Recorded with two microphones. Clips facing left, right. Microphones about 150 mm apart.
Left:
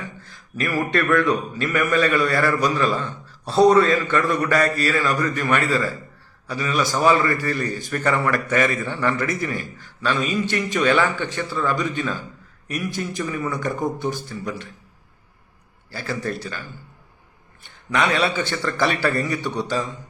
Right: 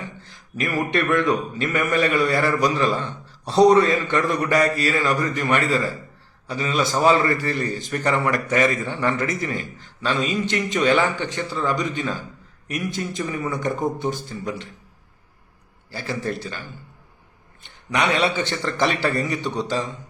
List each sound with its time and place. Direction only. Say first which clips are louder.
0.0 s a man's voice: even; 20° right (ahead or behind)
15.9 s a man's voice: even; 20° right (ahead or behind)
17.9 s a man's voice: even; 20° right (ahead or behind)